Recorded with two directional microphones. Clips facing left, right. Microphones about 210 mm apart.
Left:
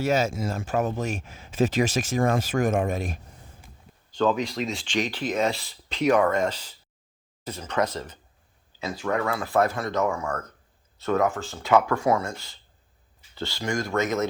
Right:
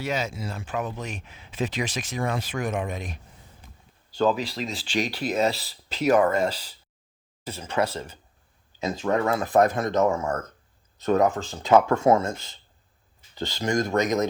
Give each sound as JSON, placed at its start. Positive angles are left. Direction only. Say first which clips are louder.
{"t": 0.0, "sound": "speech", "louder": "left 5 dB", "side_deg": 45}
{"t": 4.1, "sound": "speech", "louder": "even", "side_deg": -10}
{"t": 5.5, "sound": "speech", "louder": "right 1 dB", "side_deg": -35}
{"t": 5.9, "sound": "speech", "louder": "right 1 dB", "side_deg": -5}
{"t": 8.8, "sound": "speech", "louder": "right 3 dB", "side_deg": -20}